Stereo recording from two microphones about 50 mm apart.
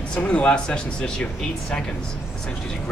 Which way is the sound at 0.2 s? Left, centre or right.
Left.